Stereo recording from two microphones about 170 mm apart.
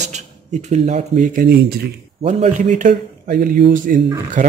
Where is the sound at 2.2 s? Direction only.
40° right (ahead or behind).